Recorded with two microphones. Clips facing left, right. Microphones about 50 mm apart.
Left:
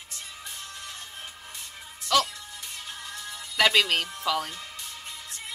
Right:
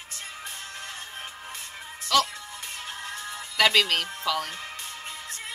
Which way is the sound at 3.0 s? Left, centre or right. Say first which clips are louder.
Right 3 dB; right.